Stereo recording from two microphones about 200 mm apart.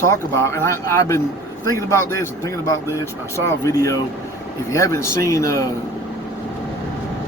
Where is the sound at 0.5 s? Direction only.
15° left (ahead or behind).